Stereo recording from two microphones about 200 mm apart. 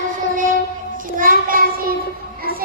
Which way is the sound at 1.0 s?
45° right (ahead or behind).